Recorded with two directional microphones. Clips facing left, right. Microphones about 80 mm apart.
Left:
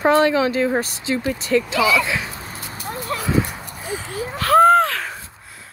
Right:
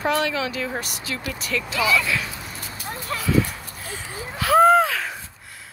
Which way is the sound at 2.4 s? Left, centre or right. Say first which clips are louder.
Left 2 dB; left.